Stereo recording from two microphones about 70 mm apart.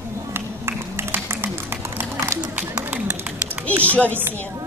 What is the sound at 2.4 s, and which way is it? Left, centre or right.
Run, right.